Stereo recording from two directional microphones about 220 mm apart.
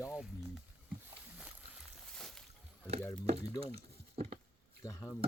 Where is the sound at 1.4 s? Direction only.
5° right (ahead or behind).